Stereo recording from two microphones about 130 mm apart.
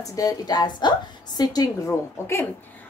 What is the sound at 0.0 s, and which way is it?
A woman's voice, 25° left (ahead or behind).